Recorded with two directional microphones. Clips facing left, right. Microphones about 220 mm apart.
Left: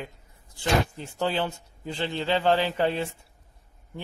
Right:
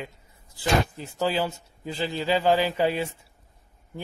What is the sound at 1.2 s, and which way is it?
A man's voice, 10° right (ahead or behind).